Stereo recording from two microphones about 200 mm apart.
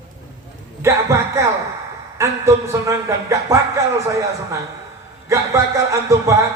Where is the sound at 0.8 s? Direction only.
15° right (ahead or behind).